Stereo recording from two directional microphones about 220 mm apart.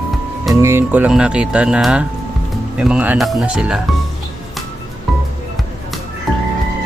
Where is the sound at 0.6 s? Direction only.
10° right (ahead or behind).